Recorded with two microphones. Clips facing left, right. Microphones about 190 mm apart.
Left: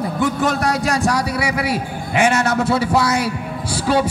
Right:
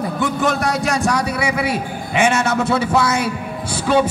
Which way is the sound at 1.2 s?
25° right (ahead or behind).